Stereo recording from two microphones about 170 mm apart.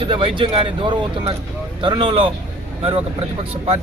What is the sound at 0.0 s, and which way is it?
Speech, 30° right (ahead or behind).